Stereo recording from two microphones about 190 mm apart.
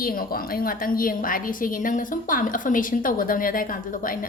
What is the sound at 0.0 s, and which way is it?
A woman's voice, 50° left (ahead or behind).